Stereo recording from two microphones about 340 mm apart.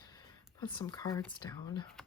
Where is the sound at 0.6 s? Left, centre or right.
Centre.